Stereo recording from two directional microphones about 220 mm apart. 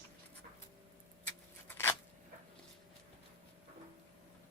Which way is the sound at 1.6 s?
10° left (ahead or behind).